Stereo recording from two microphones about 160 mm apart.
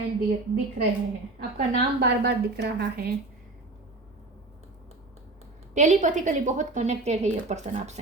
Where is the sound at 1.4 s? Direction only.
80° right.